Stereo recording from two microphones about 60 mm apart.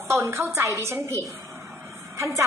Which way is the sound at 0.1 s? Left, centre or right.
Right.